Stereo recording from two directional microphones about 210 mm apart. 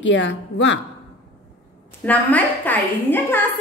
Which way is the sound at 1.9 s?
10° left (ahead or behind).